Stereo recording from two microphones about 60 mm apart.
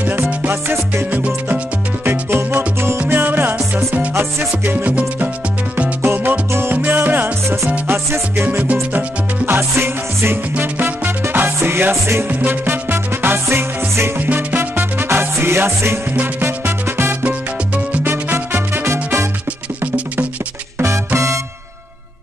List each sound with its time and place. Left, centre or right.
0.3 s music: right
2.0 s music: right
4.1 s music: right
8.4 s music: right
9.5 s music: right
12.3 s music: right
14.2 s music: right